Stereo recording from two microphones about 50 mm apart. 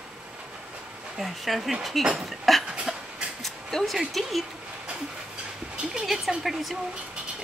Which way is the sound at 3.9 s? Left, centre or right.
Centre.